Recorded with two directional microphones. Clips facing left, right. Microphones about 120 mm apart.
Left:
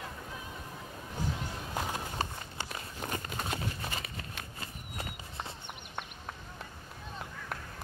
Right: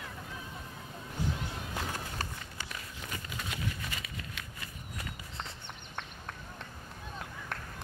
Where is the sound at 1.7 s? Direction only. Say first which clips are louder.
Left 4 dB; 20° left (ahead or behind).